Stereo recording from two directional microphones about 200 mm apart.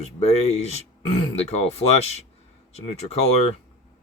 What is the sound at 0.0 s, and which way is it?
Speech, 30° left (ahead or behind).